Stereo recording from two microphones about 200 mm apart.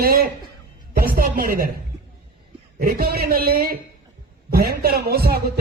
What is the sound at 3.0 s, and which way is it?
A man's voice, 50° right (ahead or behind).